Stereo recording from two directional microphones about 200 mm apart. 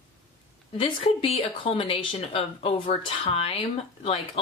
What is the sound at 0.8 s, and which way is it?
A woman's voice, 30° left (ahead or behind).